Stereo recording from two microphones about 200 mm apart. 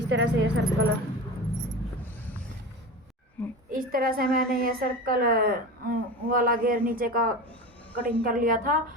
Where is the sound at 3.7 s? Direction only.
45° right (ahead or behind).